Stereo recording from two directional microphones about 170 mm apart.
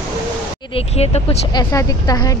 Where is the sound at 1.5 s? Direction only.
20° left (ahead or behind).